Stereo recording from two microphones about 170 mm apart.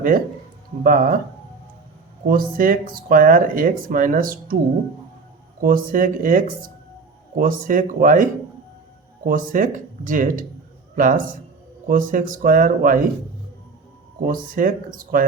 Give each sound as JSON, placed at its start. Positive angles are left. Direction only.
{"t": 0.9, "sound": "speech", "side_deg": -55}
{"t": 2.2, "sound": "speech", "side_deg": -55}
{"t": 5.6, "sound": "speech", "side_deg": -55}
{"t": 14.3, "sound": "speech", "side_deg": -55}